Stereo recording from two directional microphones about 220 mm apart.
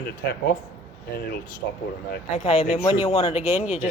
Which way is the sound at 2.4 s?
25° left (ahead or behind).